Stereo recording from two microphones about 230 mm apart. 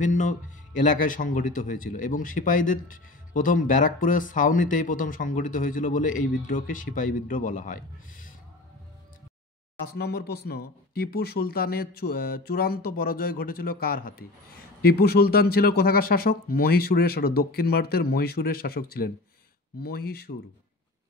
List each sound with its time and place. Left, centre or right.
0.0 s a man's voice: left
9.9 s a man's voice: left